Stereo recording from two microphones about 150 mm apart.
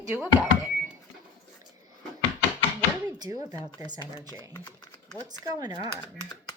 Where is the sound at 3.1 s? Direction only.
25° right (ahead or behind).